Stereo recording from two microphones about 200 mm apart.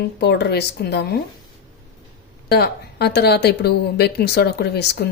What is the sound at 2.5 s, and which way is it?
Speech, 55° left (ahead or behind).